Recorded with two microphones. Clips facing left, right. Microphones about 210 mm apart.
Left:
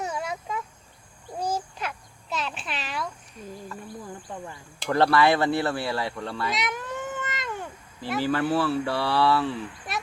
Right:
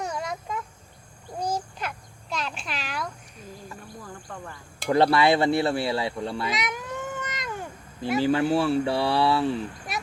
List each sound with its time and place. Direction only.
0.0 s insect: 5° left (ahead or behind)
1.4 s a sound: 5° left (ahead or behind)
4.0 s cricket: 15° left (ahead or behind)
4.9 s speech: 15° right (ahead or behind)
6.5 s cat: centre (ahead or behind)
8.2 s speech: 15° right (ahead or behind)